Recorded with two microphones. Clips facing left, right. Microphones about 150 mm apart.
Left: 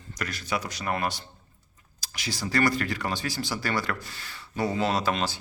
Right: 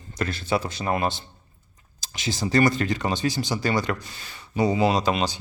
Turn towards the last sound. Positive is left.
turn(degrees=-20)  # may be behind; listen again after turning